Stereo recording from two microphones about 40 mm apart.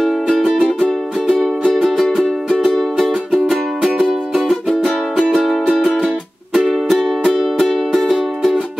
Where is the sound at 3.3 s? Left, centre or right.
Centre.